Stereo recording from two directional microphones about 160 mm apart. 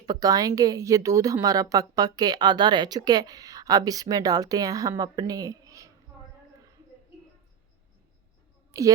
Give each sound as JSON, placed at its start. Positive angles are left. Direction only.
{"t": 0.0, "sound": "a woman's voice", "side_deg": -25}
{"t": 8.7, "sound": "a woman's voice", "side_deg": -20}